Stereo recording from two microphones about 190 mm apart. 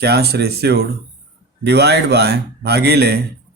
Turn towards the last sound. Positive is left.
turn(degrees=-60)  # may be behind; listen again after turning